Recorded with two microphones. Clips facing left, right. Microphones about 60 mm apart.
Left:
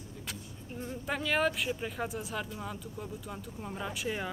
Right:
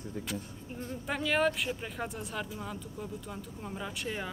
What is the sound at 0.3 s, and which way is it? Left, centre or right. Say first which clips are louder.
Speech: right 4 dB; centre.